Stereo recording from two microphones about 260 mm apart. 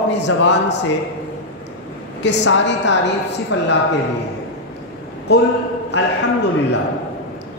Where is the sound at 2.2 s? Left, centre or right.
Left.